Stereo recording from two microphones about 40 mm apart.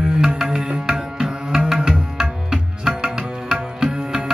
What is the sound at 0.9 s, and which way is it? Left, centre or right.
Tabla, centre.